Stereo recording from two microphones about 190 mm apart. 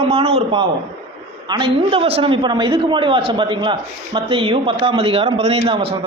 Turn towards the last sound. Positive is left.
turn(degrees=-30)  # may be behind; listen again after turning